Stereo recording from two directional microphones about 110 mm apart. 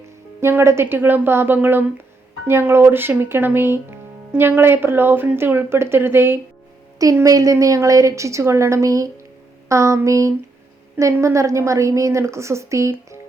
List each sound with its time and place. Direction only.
0.4 s a woman's voice: 25° right (ahead or behind)